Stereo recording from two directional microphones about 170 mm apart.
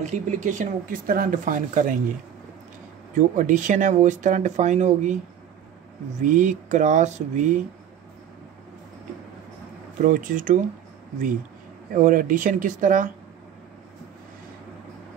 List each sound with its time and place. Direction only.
0.0 s speech: 45° right (ahead or behind)
3.2 s speech: 50° right (ahead or behind)
6.2 s speech: 45° right (ahead or behind)
10.0 s speech: 50° right (ahead or behind)
11.9 s speech: 50° right (ahead or behind)